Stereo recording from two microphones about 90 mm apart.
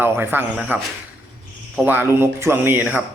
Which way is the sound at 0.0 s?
25° right (ahead or behind).